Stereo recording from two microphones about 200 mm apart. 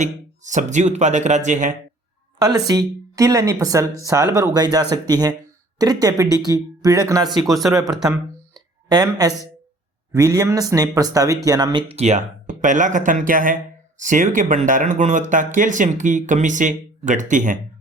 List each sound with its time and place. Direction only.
0.0 s speech: 35° right (ahead or behind)
2.4 s speech: 20° right (ahead or behind); by 17.6 s 40° right (ahead or behind)